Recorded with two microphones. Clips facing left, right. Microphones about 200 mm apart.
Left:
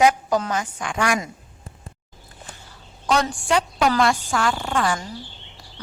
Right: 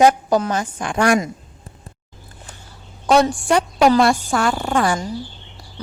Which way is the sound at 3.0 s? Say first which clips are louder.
Right 7 dB; 30° right (ahead or behind).